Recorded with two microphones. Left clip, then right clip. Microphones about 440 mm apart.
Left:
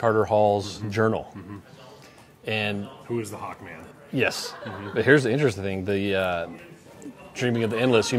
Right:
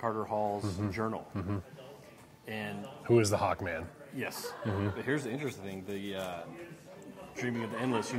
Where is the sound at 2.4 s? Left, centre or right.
Left.